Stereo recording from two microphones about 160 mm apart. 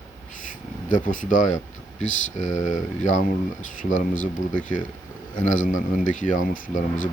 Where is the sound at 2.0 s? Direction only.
50° left (ahead or behind).